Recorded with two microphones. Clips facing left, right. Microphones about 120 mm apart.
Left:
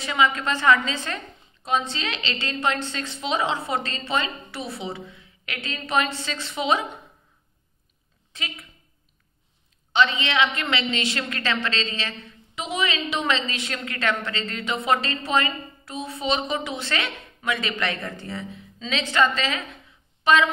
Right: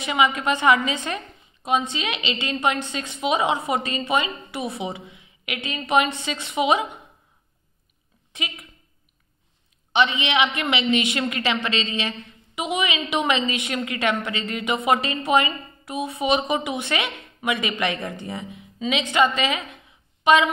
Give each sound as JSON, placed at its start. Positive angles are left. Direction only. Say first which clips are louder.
{"t": 0.0, "sound": "a woman's voice", "louder": "right 1 dB", "side_deg": -15}
{"t": 8.3, "sound": "a woman's voice", "louder": "right 3 dB", "side_deg": -15}
{"t": 9.9, "sound": "a woman's voice", "louder": "right 1 dB", "side_deg": -20}